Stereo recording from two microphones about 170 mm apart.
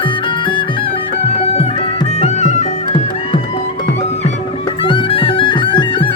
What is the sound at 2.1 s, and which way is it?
Music, 40° left (ahead or behind).